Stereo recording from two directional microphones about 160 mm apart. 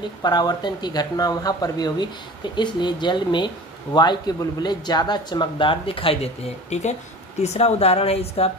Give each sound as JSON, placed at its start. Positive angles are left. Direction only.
{"t": 0.2, "sound": "speech", "side_deg": 25}